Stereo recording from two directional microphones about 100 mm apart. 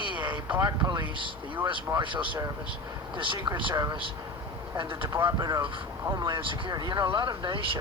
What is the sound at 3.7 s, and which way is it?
Speech, 40° right (ahead or behind).